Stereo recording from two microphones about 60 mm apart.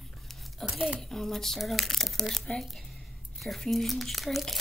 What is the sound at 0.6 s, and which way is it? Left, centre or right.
Speech, centre.